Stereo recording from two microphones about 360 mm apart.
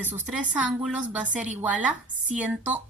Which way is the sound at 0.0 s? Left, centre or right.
Centre.